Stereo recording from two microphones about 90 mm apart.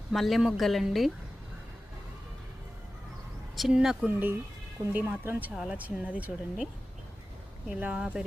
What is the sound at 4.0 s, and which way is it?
Speech, 20° right (ahead or behind).